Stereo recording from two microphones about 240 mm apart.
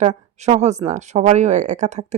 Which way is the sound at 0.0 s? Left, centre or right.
Right.